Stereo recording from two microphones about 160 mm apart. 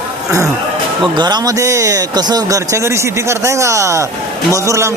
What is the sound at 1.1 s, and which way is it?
A man's voice, 25° right (ahead or behind).